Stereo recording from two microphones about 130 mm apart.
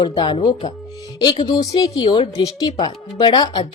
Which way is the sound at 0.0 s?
40° left (ahead or behind).